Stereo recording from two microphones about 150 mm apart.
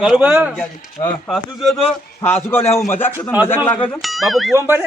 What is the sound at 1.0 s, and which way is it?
Speech, 40° left (ahead or behind).